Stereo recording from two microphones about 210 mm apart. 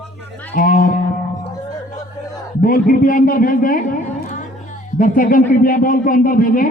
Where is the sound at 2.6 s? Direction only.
40° left (ahead or behind).